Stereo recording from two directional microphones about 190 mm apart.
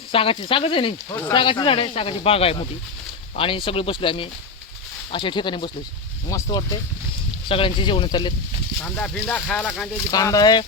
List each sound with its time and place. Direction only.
0.1 s speech: 30° left (ahead or behind)
8.8 s speech: 5° left (ahead or behind)
10.1 s speech: 20° left (ahead or behind)